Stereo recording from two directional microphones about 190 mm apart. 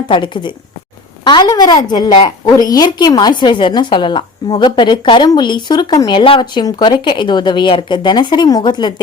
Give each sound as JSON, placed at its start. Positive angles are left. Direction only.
{"t": 0.1, "sound": "a woman's voice", "side_deg": 25}